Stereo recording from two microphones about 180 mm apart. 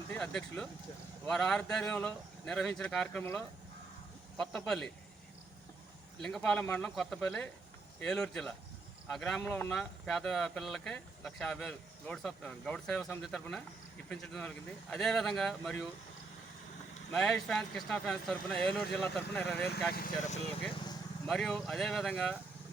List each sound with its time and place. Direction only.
0.1 s speech: 5° left (ahead or behind)
6.2 s speech: 5° left (ahead or behind)
17.1 s speech: 5° left (ahead or behind)
19.9 s speech: 50° left (ahead or behind)
21.2 s speech: 5° left (ahead or behind)